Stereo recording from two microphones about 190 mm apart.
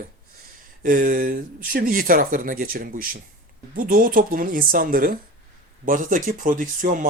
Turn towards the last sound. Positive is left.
turn(degrees=-45)  # may be behind; listen again after turning